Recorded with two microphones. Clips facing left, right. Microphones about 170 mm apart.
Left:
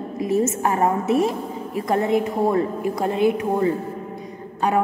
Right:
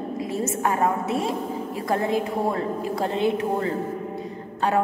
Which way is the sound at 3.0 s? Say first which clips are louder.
Left 4 dB; 25° right (ahead or behind).